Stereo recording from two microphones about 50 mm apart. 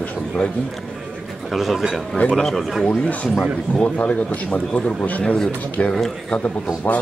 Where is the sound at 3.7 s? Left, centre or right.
Left.